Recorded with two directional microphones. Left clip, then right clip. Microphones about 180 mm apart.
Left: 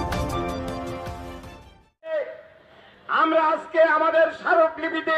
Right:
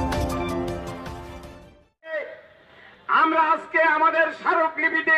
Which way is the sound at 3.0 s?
40° left (ahead or behind).